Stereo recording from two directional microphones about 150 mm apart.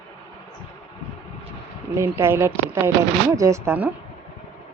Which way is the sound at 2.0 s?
15° right (ahead or behind).